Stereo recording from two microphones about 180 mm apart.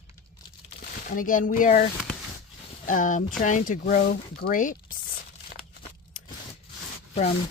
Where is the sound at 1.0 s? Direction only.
50° left (ahead or behind).